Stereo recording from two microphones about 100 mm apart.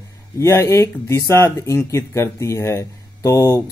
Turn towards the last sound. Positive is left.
turn(degrees=30)  # may be behind; listen again after turning